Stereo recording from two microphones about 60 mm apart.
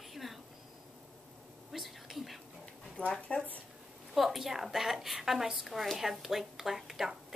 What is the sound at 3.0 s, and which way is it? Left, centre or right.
Speech, centre.